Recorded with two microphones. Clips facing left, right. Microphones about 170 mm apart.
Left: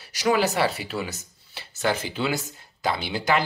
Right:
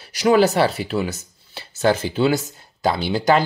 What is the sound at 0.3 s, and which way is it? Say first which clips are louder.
Speech: right 6 dB; 35° right (ahead or behind).